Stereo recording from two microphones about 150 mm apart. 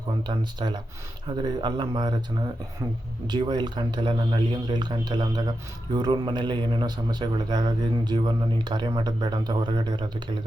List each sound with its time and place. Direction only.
0.3 s speech: 30° right (ahead or behind)